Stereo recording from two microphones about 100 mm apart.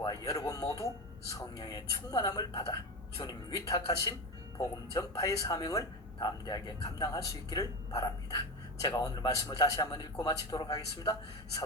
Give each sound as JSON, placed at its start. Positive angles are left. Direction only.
{"t": 0.0, "sound": "speech", "side_deg": 40}